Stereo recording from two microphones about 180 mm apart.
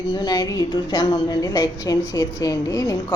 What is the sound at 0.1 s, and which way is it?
A woman's voice, 25° left (ahead or behind).